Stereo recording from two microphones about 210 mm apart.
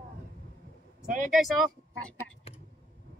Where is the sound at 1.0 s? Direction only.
40° right (ahead or behind).